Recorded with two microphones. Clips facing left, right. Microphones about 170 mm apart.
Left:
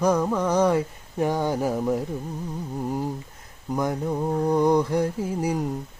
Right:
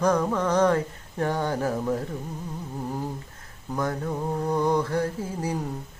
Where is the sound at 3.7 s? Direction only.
15° left (ahead or behind).